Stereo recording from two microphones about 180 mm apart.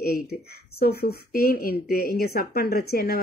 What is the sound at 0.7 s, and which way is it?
A woman's voice, 60° left (ahead or behind).